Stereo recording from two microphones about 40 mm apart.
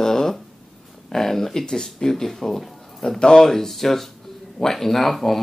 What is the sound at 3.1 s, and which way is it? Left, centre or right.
Speech, centre.